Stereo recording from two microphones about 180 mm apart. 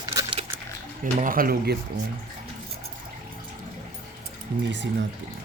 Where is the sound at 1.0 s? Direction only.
50° right (ahead or behind).